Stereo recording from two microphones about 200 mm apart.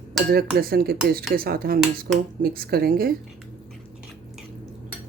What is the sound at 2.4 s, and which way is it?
Speech, 50° right (ahead or behind).